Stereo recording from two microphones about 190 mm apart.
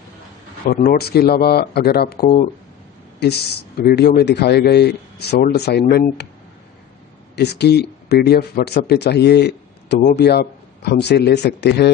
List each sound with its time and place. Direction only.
0.7 s speech: 50° left (ahead or behind)
3.2 s speech: 60° left (ahead or behind)
7.3 s speech: 60° left (ahead or behind)